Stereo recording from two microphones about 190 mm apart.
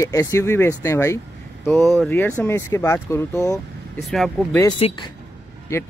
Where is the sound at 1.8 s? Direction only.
Centre (ahead or behind).